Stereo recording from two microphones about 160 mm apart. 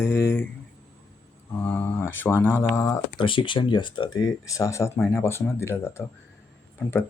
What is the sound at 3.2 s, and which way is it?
Speech, 30° left (ahead or behind).